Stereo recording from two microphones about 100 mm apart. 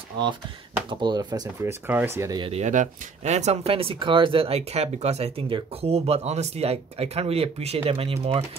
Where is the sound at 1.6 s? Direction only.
20° right (ahead or behind).